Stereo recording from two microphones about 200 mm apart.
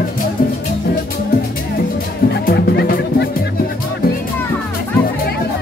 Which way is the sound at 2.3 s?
50° left (ahead or behind).